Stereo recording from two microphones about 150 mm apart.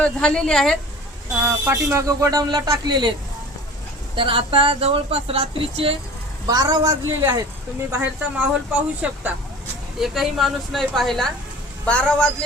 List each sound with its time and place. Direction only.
0.0 s a woman's voice: 5° left (ahead or behind)
1.5 s speech: 20° right (ahead or behind)
4.1 s speech: 35° right (ahead or behind)
6.5 s speech: 25° right (ahead or behind)
8.4 s a woman's voice: 10° right (ahead or behind)